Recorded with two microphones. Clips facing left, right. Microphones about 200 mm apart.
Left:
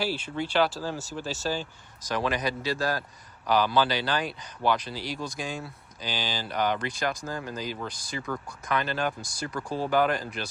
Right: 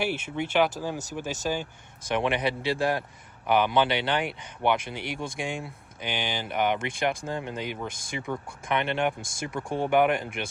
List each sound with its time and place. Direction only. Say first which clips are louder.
0.3 s speech: right 1 dB; 20° right (ahead or behind)